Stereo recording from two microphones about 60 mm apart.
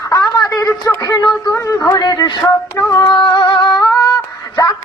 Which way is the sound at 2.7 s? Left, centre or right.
Left.